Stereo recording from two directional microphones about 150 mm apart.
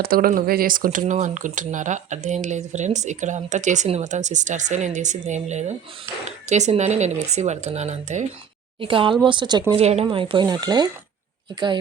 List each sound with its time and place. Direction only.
0.0 s speech: 75° right (ahead or behind)
0.9 s speech: 55° right (ahead or behind)
8.8 s speech: 35° right (ahead or behind)
9.7 s speech: 45° right (ahead or behind); by 10.8 s 25° right (ahead or behind)